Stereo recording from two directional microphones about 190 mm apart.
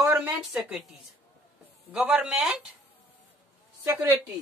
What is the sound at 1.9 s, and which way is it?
Speech, 5° right (ahead or behind).